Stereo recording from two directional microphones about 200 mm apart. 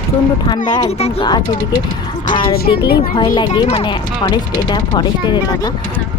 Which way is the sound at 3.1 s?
25° left (ahead or behind).